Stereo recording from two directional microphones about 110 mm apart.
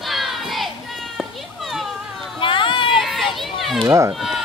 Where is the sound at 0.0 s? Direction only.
Centre (ahead or behind).